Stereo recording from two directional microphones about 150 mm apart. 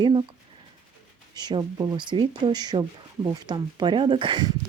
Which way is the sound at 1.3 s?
30° right (ahead or behind).